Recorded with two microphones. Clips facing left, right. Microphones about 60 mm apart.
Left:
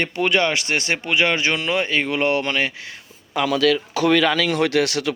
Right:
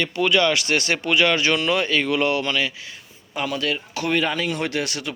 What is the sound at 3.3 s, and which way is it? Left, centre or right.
Speech, left.